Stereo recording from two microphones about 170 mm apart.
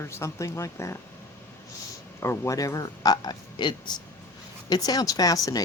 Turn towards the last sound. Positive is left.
turn(degrees=20)  # may be behind; listen again after turning